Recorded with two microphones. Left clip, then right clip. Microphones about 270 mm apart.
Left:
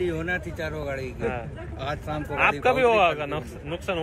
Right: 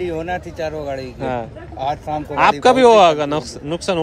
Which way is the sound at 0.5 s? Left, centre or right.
Right.